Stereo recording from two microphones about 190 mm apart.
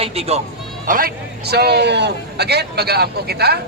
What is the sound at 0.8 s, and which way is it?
A man's voice, 50° right (ahead or behind).